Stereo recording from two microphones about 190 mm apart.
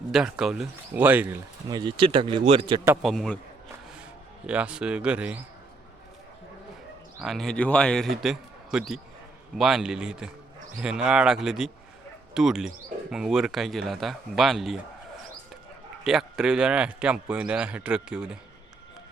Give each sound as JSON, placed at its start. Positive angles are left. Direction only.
{"t": 0.1, "sound": "speech", "side_deg": -5}
{"t": 1.7, "sound": "speech", "side_deg": -25}
{"t": 3.0, "sound": "speech", "side_deg": 0}
{"t": 4.4, "sound": "speech", "side_deg": -5}
{"t": 7.2, "sound": "speech", "side_deg": 0}
{"t": 16.0, "sound": "speech", "side_deg": -5}